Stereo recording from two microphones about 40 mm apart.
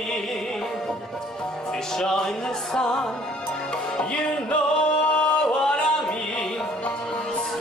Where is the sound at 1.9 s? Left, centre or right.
Centre.